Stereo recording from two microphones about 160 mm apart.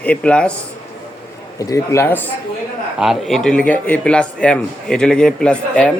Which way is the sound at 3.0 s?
Centre (ahead or behind).